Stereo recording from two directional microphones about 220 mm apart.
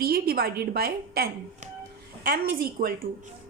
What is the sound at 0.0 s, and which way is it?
A woman's voice, 45° right (ahead or behind).